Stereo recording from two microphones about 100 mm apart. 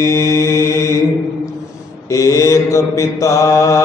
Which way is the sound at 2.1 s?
30° left (ahead or behind).